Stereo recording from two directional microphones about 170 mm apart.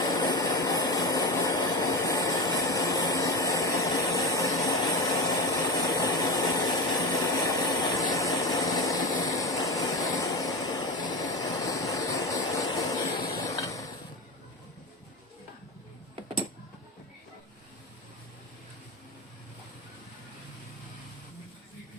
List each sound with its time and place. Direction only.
0.0 s train: 20° left (ahead or behind)